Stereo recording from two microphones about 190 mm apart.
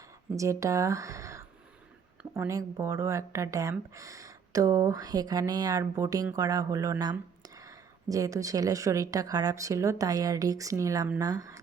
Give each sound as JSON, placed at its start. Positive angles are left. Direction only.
{"t": 0.3, "sound": "speech", "side_deg": -15}